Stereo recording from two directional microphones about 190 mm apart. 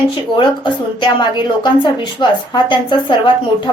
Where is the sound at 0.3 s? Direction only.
25° left (ahead or behind).